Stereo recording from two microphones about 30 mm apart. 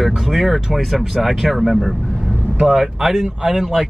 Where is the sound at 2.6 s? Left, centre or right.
Centre.